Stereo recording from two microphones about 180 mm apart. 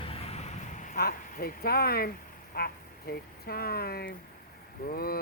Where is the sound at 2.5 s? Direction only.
60° left (ahead or behind).